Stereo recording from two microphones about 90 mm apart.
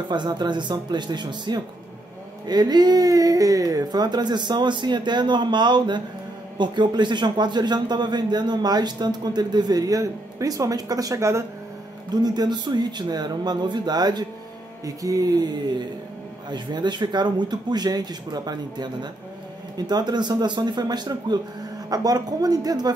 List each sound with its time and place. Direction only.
0.1 s a man's voice: 55° right (ahead or behind); by 11.4 s 35° right (ahead or behind)
12.1 s a man's voice: 50° right (ahead or behind)
15.0 s a sound: 40° right (ahead or behind)
16.4 s a man's voice: 55° right (ahead or behind)